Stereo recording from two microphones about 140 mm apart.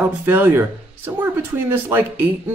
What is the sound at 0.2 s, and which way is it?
Speech, 15° right (ahead or behind).